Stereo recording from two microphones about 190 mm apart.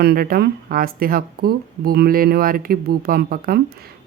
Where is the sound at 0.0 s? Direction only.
55° right (ahead or behind).